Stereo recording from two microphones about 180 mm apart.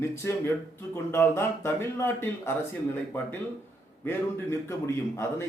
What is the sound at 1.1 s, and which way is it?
A man's voice, 15° left (ahead or behind).